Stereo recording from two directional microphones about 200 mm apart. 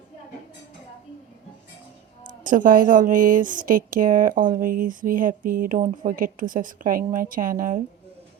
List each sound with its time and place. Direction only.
2.4 s a woman's voice: 40° right (ahead or behind)